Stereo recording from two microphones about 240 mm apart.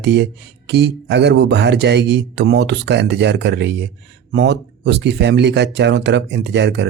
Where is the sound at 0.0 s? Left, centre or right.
Right.